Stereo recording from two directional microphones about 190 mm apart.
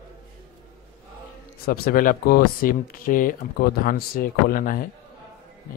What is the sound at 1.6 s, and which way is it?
Speech, 55° left (ahead or behind).